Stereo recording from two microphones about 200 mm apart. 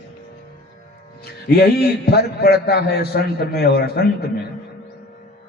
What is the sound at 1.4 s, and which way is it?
A man's voice, 50° left (ahead or behind).